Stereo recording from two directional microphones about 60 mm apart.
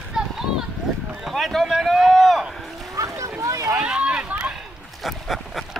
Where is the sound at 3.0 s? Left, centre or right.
Right.